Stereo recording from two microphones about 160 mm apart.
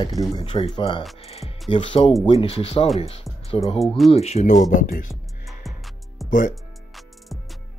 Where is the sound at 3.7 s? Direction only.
Centre (ahead or behind).